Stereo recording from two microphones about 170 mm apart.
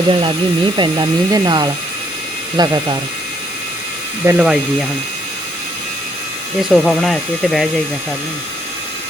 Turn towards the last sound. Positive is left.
turn(degrees=0)  # may be behind; listen again after turning